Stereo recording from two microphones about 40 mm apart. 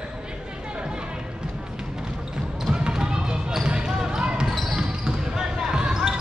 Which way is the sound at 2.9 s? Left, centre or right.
Centre.